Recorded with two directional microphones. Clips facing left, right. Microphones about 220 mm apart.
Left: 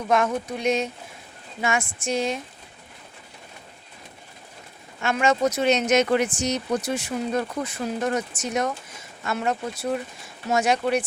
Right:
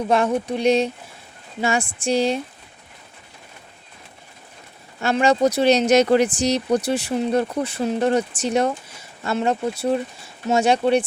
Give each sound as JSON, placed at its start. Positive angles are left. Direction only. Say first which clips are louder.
{"t": 0.1, "sound": "speech", "louder": "right 2 dB", "side_deg": -30}
{"t": 4.9, "sound": "speech", "louder": "right 4 dB", "side_deg": -35}